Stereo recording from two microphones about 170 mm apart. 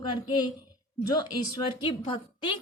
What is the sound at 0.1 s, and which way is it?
Speech, 25° left (ahead or behind).